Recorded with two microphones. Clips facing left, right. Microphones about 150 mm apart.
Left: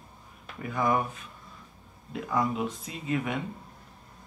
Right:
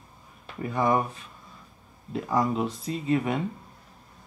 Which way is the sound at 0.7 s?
30° right (ahead or behind).